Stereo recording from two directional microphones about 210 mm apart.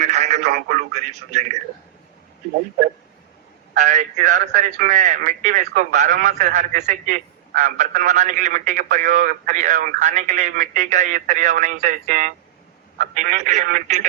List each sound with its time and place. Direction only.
0.0 s speech: 35° right (ahead or behind)
3.8 s a man's voice: 35° right (ahead or behind)